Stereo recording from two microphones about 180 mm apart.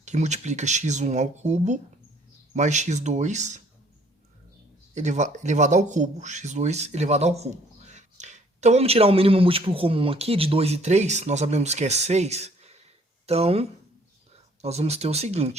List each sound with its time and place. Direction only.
0.0 s speech: 40° right (ahead or behind)
4.9 s speech: 40° right (ahead or behind)